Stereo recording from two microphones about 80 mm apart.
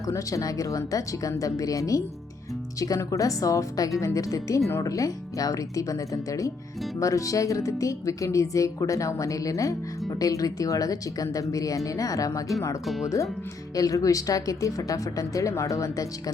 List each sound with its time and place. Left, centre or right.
0.0 s speech: left
12.8 s speech: centre
13.7 s speech: left